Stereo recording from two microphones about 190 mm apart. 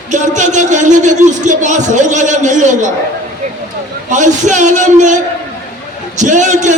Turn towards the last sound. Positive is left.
turn(degrees=-40)  # may be behind; listen again after turning